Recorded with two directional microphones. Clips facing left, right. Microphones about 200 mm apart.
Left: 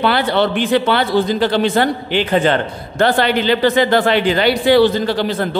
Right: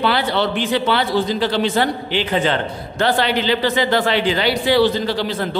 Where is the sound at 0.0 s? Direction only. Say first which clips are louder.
Left 3 dB; 55° left (ahead or behind).